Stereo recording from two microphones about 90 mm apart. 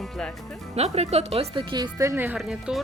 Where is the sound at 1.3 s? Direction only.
65° right (ahead or behind).